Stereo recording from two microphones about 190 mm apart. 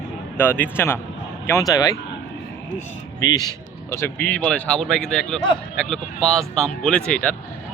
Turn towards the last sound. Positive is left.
turn(degrees=5)  # may be behind; listen again after turning